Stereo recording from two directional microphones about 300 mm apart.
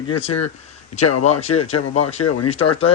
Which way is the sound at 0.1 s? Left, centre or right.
Centre.